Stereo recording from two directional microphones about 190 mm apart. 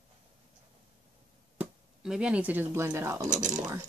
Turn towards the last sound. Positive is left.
turn(degrees=-40)  # may be behind; listen again after turning